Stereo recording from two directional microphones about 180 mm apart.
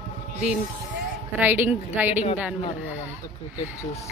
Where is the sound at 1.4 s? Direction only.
10° right (ahead or behind).